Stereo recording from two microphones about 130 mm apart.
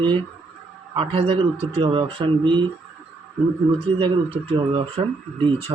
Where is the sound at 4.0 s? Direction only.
45° right (ahead or behind).